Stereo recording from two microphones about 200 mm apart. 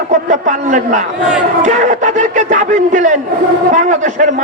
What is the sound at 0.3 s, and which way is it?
A man's voice, 40° right (ahead or behind).